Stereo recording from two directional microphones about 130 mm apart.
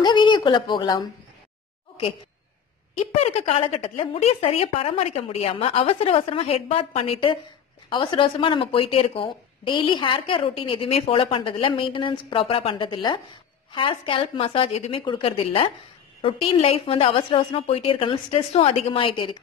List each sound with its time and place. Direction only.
0.0 s speech: 35° left (ahead or behind)
3.2 s speech: 50° left (ahead or behind)